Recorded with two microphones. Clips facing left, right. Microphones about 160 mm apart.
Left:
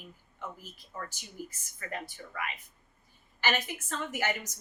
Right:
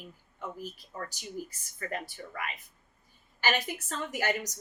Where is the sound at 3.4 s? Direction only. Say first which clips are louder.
Right 1 dB; 35° right (ahead or behind).